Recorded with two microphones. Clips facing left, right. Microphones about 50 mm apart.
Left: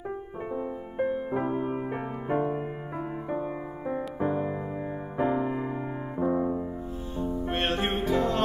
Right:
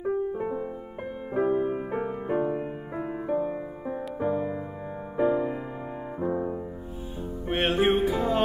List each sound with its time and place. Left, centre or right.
0.4 s music: centre
7.2 s music: centre